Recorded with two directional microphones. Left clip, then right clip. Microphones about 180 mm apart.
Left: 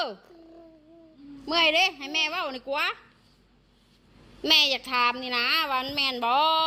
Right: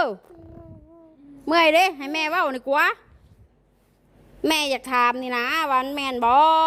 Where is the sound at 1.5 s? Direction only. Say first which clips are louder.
Right 5 dB; 70° right (ahead or behind).